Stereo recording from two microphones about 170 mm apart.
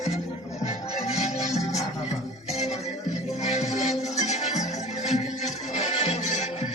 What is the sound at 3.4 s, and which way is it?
Music, 40° left (ahead or behind).